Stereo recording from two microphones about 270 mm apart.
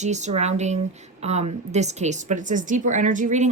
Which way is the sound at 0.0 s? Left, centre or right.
Right.